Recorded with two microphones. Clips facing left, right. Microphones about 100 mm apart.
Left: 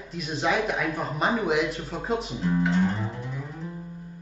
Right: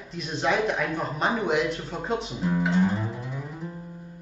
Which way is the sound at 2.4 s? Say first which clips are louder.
Right 1 dB; 10° right (ahead or behind).